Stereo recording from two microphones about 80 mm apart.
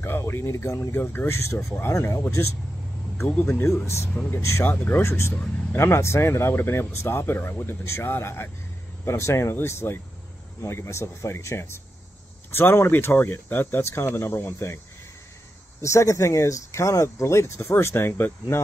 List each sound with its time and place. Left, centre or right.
0.0 s speech: left
3.4 s speech: left
4.1 s speech: left
4.4 s speech: left
4.7 s speech: left
5.0 s speech: left
15.8 s speech: left